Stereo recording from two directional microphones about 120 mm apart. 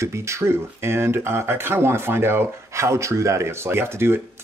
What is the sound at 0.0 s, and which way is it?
Speech, 25° right (ahead or behind).